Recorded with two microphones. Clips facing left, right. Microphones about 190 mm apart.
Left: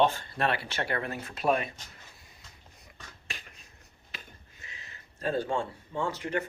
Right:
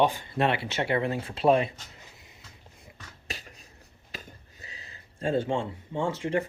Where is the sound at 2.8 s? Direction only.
35° right (ahead or behind).